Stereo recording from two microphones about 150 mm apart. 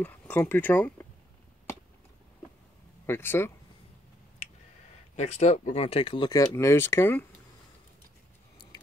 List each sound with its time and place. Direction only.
0.0 s speech: 10° left (ahead or behind)
3.1 s speech: 15° left (ahead or behind)
5.1 s speech: 45° left (ahead or behind); by 7.2 s 15° left (ahead or behind)